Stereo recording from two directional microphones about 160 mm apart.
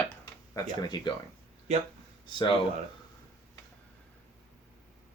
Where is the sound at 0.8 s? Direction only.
25° left (ahead or behind).